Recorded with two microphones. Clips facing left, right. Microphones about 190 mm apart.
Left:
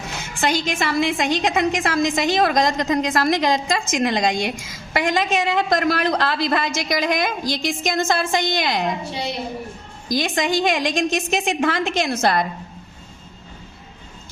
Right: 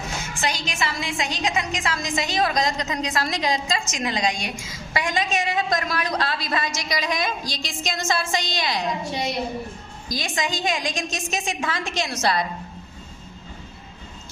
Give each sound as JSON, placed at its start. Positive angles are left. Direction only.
{"t": 0.3, "sound": "a woman's voice", "side_deg": 55}
{"t": 10.2, "sound": "a woman's voice", "side_deg": 60}